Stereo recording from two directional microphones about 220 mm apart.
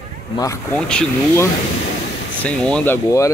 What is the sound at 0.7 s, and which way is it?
Speech, 5° left (ahead or behind).